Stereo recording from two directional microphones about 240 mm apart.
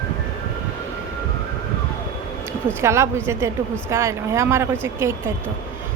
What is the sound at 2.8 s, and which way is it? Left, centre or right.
Speech, centre.